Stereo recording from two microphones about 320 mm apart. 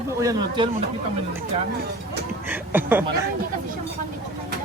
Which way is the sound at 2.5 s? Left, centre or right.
Centre.